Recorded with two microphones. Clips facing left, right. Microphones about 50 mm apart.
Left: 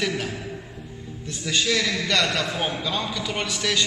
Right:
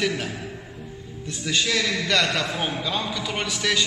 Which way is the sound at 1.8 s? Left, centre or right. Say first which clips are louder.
Even; centre.